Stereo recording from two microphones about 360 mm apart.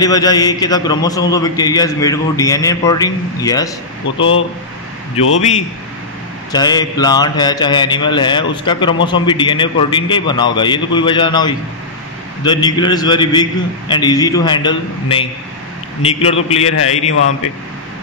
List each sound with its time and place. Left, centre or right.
0.0 s a man's voice: centre
4.2 s speech: left
6.5 s a man's voice: centre